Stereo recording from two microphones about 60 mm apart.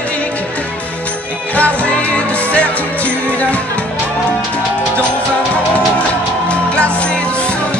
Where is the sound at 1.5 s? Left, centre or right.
Left.